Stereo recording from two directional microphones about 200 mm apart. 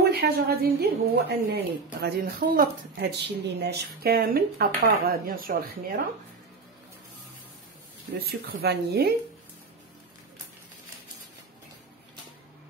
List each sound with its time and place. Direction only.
0.1 s a woman's voice: 50° right (ahead or behind)
8.3 s a woman's voice: 50° right (ahead or behind)